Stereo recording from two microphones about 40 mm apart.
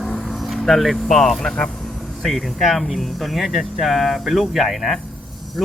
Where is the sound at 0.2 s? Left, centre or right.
Centre.